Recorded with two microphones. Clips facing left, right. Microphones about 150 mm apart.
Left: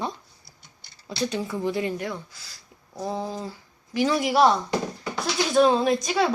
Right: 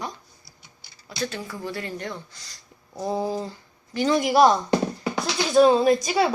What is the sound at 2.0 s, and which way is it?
Speech, 5° left (ahead or behind).